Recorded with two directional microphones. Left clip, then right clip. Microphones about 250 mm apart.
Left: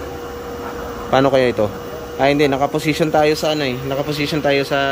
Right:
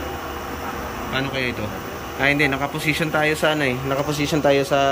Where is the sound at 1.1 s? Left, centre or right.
Centre.